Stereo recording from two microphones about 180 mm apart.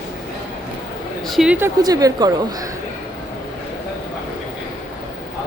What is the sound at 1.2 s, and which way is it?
Speech, centre (ahead or behind).